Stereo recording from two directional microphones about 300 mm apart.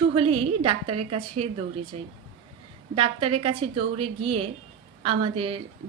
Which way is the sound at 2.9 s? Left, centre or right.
Centre.